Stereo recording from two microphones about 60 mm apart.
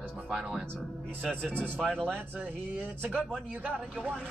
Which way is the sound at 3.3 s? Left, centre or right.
Centre.